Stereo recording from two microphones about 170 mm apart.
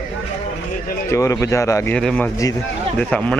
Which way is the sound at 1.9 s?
5° left (ahead or behind).